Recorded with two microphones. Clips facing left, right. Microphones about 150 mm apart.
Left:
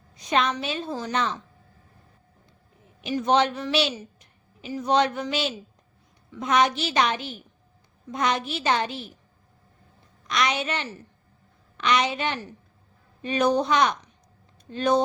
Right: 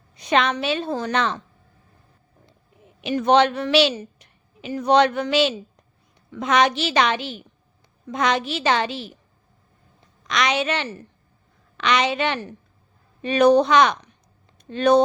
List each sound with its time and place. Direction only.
0.2 s a woman's voice: 75° right (ahead or behind)
3.0 s a woman's voice: 70° right (ahead or behind); by 9.1 s 90° right
10.2 s a woman's voice: 90° right
14.7 s a woman's voice: 70° right (ahead or behind)